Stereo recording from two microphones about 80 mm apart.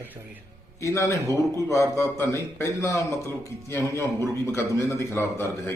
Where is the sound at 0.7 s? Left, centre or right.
Left.